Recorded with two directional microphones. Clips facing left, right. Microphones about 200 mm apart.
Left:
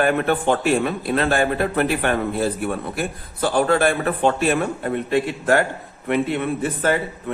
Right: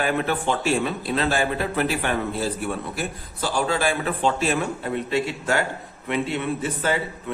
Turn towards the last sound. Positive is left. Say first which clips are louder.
# left 3 dB
turn(degrees=55)  # may be behind; listen again after turning